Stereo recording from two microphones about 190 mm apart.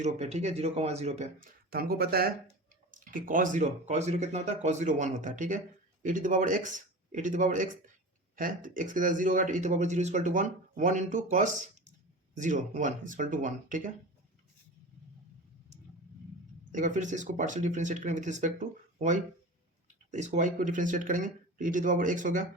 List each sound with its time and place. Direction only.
0.0 s speech: 35° right (ahead or behind)
1.7 s speech: 50° right (ahead or behind)
16.7 s speech: 40° right (ahead or behind)